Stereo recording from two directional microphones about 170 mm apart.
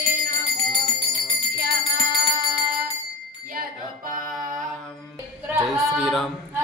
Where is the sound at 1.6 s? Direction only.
65° right (ahead or behind).